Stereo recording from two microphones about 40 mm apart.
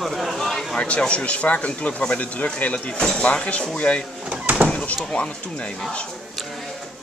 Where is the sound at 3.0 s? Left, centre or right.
Left.